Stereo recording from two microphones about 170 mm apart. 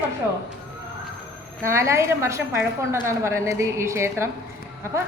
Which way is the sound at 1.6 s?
15° right (ahead or behind).